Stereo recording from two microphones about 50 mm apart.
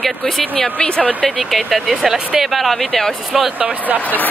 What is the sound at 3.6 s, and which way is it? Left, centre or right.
Speech, right.